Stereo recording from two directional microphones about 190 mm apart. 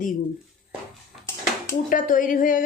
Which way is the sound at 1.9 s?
45° left (ahead or behind).